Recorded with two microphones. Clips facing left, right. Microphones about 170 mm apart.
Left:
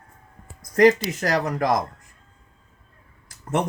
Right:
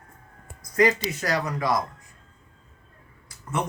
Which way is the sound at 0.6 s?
45° left (ahead or behind).